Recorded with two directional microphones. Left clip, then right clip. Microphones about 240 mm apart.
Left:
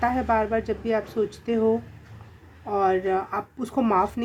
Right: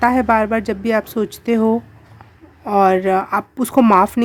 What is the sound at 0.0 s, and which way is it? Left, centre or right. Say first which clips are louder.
A woman's voice: right 8 dB; right.